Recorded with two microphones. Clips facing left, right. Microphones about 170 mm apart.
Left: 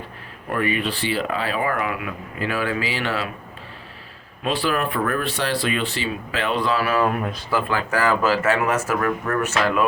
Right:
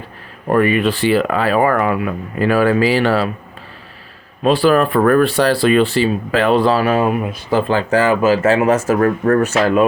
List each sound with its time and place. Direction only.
0.4 s speech: 55° right (ahead or behind)
4.4 s speech: 35° right (ahead or behind)
4.9 s speech: 55° right (ahead or behind)
5.4 s speech: 40° right (ahead or behind)
7.0 s speech: 10° right (ahead or behind)
7.5 s speech: 30° right (ahead or behind)
9.0 s speech: 45° right (ahead or behind)
9.4 s speech: 30° right (ahead or behind)